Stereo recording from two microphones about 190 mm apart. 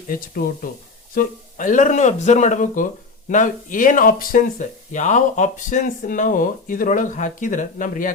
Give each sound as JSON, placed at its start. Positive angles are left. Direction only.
{"t": 0.1, "sound": "speech", "side_deg": 50}